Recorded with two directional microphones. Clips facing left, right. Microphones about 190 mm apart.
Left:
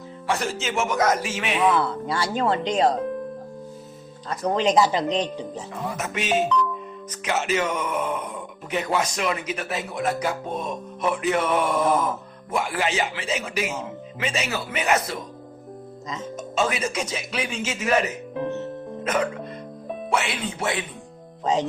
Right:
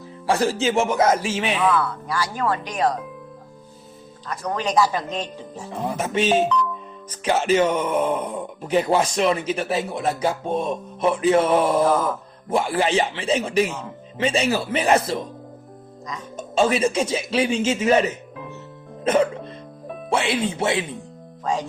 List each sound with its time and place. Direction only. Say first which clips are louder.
0.3 s a man's voice: right 6 dB; 35° right (ahead or behind)
1.5 s speech: left 3 dB; 25° left (ahead or behind)
4.3 s speech: left 4 dB; 25° left (ahead or behind)
6.0 s a man's voice: right 5 dB; 30° right (ahead or behind)
16.4 s speech: right 6 dB; 30° right (ahead or behind)
19.0 s music: right 6 dB; 30° right (ahead or behind)
20.1 s speech: right 5 dB; 30° right (ahead or behind)
21.4 s speech: left 2 dB; 20° left (ahead or behind)